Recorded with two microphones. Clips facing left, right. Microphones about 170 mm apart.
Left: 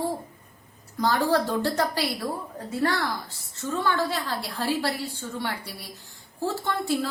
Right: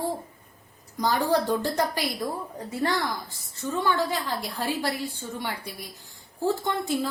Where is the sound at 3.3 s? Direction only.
15° right (ahead or behind).